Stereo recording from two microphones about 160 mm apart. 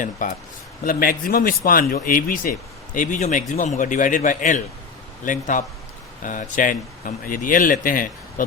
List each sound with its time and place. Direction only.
0.2 s speech: 55° left (ahead or behind)